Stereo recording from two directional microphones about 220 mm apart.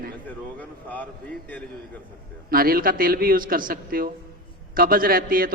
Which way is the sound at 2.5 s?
40° right (ahead or behind).